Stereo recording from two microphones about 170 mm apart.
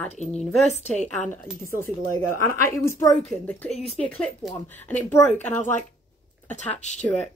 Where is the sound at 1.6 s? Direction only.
15° left (ahead or behind).